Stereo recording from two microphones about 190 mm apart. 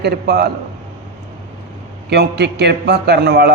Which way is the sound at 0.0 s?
60° right (ahead or behind).